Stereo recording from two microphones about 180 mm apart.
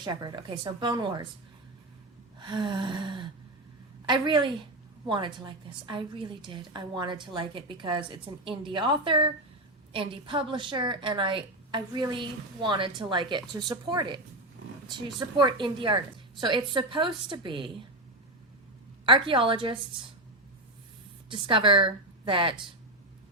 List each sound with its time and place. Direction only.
0.0 s a woman's voice: 25° right (ahead or behind)
2.4 s gasp: 25° right (ahead or behind)
4.0 s a woman's voice: 25° right (ahead or behind)
19.0 s a woman's voice: 30° right (ahead or behind)
21.2 s a woman's voice: 30° right (ahead or behind)